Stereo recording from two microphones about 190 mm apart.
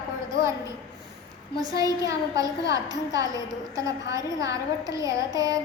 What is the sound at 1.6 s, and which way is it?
A woman's voice, 20° right (ahead or behind).